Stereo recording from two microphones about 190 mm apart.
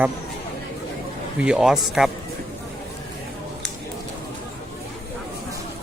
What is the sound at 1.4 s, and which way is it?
Speech, 5° right (ahead or behind).